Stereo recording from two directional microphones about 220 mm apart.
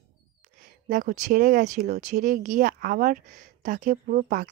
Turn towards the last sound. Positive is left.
turn(degrees=-35)  # may be behind; listen again after turning